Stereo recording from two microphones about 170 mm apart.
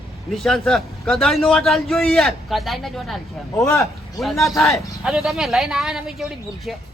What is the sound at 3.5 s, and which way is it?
Speech, 15° left (ahead or behind).